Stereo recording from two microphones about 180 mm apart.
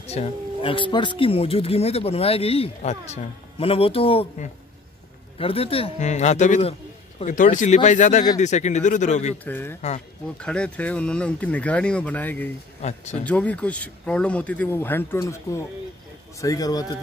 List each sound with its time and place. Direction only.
0.0 s speech: 35° left (ahead or behind)
9.4 s speech: 10° left (ahead or behind)
9.8 s speech: 40° left (ahead or behind)
10.4 s speech: 5° left (ahead or behind)
12.8 s speech: 40° left (ahead or behind)
13.2 s a man's voice: 5° left (ahead or behind)